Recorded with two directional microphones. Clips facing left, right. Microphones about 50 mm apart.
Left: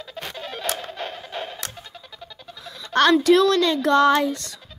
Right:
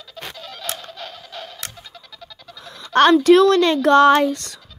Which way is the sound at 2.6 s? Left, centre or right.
Right.